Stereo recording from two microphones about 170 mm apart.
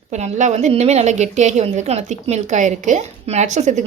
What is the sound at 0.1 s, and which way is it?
A woman's voice, 45° right (ahead or behind).